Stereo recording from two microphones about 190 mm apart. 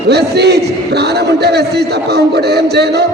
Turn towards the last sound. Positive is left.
turn(degrees=-60)  # may be behind; listen again after turning